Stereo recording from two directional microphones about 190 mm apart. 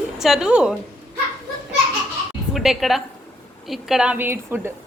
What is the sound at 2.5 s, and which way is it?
A woman's voice, centre (ahead or behind).